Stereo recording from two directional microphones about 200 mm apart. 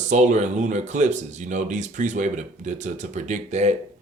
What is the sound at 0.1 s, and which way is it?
Speech, 35° right (ahead or behind).